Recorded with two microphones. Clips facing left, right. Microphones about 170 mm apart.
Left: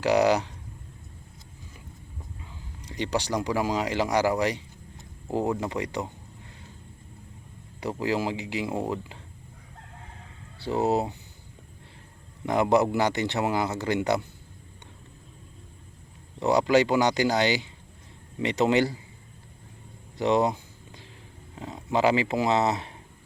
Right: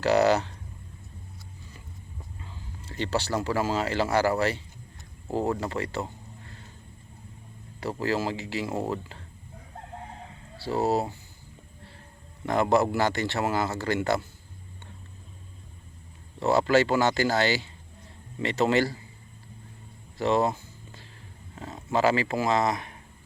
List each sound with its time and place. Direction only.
0.0 s speech: 15° left (ahead or behind)
2.4 s speech: 15° left (ahead or behind)
7.8 s speech: 15° left (ahead or behind)
10.6 s speech: 20° left (ahead or behind)
12.5 s speech: 15° left (ahead or behind)
16.4 s speech: 15° left (ahead or behind)
20.1 s a sound: 20° left (ahead or behind)
21.5 s speech: 15° left (ahead or behind)